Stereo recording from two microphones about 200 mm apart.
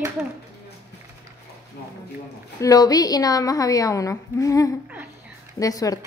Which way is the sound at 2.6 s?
20° left (ahead or behind).